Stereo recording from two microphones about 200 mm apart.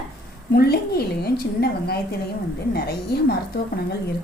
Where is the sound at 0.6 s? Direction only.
50° left (ahead or behind).